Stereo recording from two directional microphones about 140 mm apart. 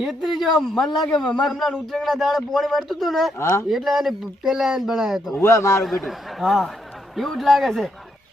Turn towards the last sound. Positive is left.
turn(degrees=0)  # may be behind; listen again after turning